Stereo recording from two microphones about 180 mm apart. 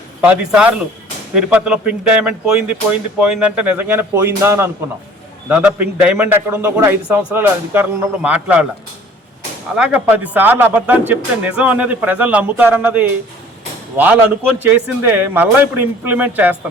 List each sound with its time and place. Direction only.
0.2 s a man's voice: 10° right (ahead or behind)
9.7 s a man's voice: 5° right (ahead or behind)